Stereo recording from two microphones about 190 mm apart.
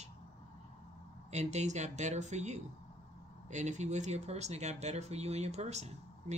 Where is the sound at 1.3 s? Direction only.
35° right (ahead or behind).